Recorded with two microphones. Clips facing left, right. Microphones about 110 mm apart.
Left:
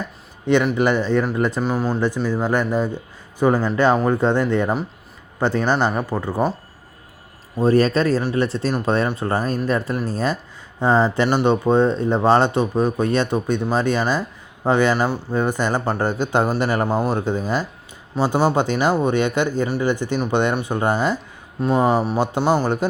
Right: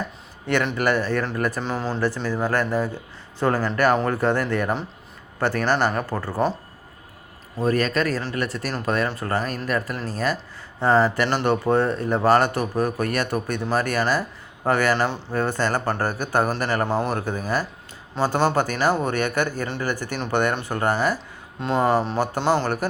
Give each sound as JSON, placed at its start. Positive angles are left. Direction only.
{"t": 0.5, "sound": "speech", "side_deg": 20}
{"t": 1.6, "sound": "speech", "side_deg": 10}
{"t": 7.5, "sound": "speech", "side_deg": 30}